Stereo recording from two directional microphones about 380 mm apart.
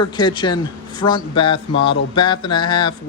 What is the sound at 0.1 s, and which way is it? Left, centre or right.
A man's voice, centre.